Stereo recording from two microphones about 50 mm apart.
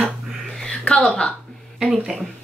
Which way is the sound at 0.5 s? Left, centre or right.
Centre.